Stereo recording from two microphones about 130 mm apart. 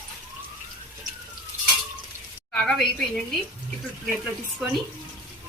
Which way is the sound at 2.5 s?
5° left (ahead or behind).